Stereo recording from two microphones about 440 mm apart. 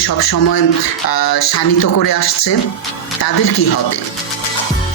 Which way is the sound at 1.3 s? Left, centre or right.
Left.